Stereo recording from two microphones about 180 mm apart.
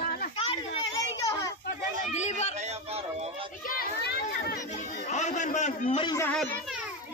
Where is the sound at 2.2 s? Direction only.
40° left (ahead or behind).